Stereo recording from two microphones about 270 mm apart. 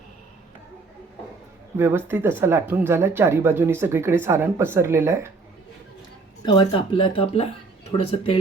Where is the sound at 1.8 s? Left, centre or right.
Centre.